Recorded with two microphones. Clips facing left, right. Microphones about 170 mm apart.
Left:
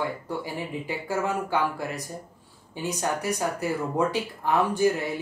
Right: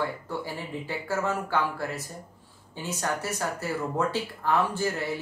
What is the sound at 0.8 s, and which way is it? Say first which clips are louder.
Speech: even; 15° left (ahead or behind).